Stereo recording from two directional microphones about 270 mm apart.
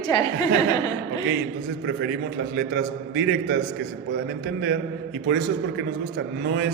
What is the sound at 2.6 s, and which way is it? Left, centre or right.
Mantra, right.